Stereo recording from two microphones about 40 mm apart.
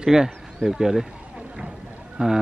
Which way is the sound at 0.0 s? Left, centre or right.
Centre.